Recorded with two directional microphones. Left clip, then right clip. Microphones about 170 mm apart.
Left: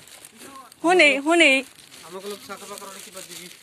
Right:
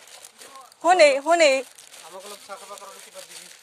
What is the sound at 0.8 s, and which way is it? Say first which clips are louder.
Speech: right 1 dB; 45° right (ahead or behind).